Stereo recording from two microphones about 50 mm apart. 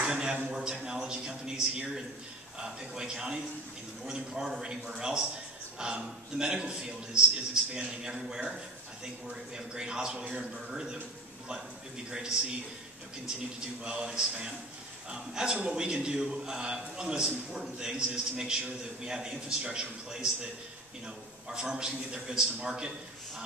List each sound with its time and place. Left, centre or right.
0.0 s a sound: centre
0.5 s a man's voice: centre
12.1 s a man's voice: centre
13.8 s a man's voice: centre
21.5 s a man's voice: centre